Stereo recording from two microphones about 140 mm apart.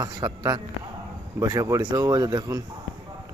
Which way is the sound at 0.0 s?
30° right (ahead or behind).